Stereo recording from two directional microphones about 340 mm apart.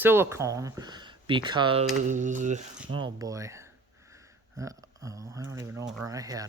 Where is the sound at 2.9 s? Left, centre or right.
Centre.